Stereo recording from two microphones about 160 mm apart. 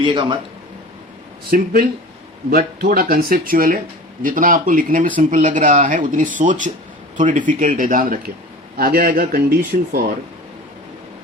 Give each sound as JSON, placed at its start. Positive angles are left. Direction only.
{"t": 0.0, "sound": "speech", "side_deg": -30}
{"t": 1.5, "sound": "speech", "side_deg": -65}
{"t": 8.7, "sound": "speech", "side_deg": -70}